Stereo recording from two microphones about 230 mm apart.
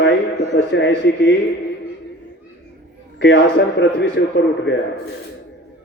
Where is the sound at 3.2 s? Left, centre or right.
Left.